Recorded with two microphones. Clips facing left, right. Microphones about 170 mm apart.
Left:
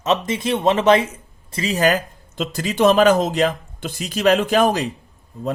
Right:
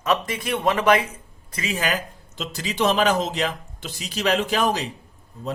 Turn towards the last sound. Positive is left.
turn(degrees=50)  # may be behind; listen again after turning